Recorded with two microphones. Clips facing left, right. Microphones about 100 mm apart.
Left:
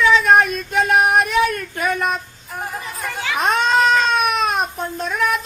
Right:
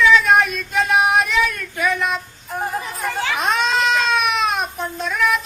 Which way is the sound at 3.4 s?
50° left (ahead or behind).